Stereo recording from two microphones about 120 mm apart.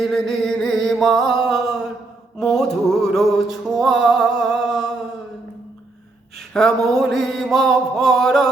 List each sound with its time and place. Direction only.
0.0 s music: centre (ahead or behind)
6.5 s speech: centre (ahead or behind)
6.7 s mantra: 30° right (ahead or behind)
7.0 s music: centre (ahead or behind)